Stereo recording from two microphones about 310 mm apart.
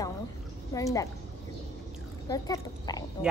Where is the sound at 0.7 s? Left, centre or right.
Centre.